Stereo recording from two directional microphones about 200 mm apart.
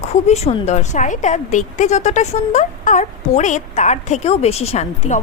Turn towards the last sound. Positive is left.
turn(degrees=35)  # may be behind; listen again after turning